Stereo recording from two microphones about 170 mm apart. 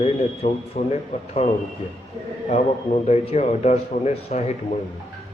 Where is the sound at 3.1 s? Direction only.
40° left (ahead or behind).